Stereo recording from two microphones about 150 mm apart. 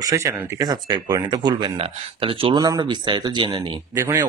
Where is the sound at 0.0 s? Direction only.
20° right (ahead or behind).